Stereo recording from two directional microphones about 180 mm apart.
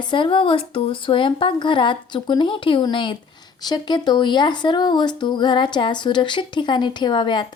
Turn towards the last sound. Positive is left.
turn(degrees=25)  # may be behind; listen again after turning